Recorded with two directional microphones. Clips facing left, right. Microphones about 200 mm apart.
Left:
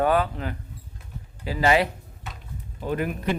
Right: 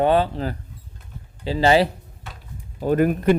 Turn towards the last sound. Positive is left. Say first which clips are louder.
# right 9 dB
turn(degrees=-50)  # may be behind; listen again after turning